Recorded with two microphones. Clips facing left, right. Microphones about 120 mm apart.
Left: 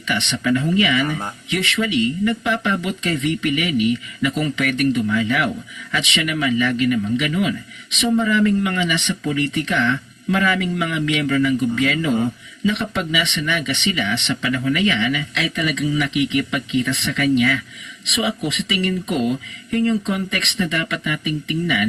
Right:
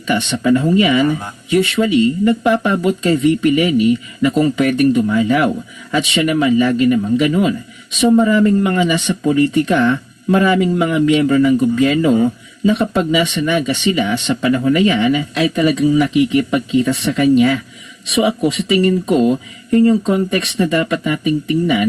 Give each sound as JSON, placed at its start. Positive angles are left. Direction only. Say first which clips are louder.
{"t": 0.1, "sound": "speech", "louder": "right 6 dB", "side_deg": -40}